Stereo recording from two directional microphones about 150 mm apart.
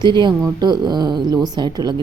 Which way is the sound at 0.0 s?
30° right (ahead or behind).